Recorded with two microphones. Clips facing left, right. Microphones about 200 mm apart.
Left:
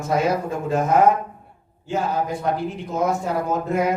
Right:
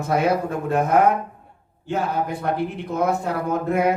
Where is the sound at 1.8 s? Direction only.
60° right (ahead or behind).